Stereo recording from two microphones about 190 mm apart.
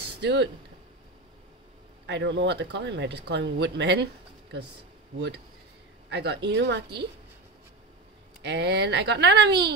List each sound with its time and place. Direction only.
0.2 s speech: 65° right (ahead or behind)
2.0 s speech: 70° right (ahead or behind)
6.0 s speech: 60° right (ahead or behind)
8.4 s speech: 60° right (ahead or behind)